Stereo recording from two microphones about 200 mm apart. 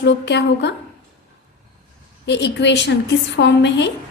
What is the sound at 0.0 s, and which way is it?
Speech, 60° left (ahead or behind).